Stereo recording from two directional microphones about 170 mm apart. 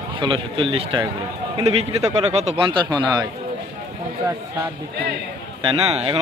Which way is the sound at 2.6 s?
30° right (ahead or behind).